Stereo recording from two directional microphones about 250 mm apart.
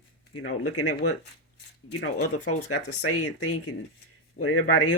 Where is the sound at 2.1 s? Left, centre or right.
Left.